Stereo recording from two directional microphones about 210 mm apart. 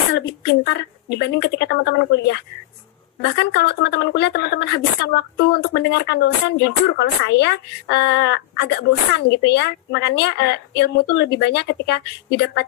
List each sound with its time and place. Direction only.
0.5 s speech: 55° left (ahead or behind)